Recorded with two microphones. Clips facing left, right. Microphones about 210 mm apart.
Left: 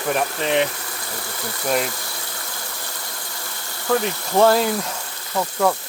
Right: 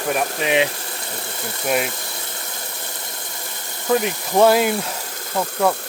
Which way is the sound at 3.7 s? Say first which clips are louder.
Right 2 dB; 20° right (ahead or behind).